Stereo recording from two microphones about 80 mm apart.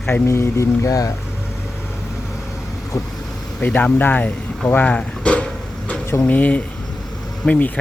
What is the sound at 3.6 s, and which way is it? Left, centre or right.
Speech, centre.